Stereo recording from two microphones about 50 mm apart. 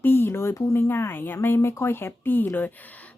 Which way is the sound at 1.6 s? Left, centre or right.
Left.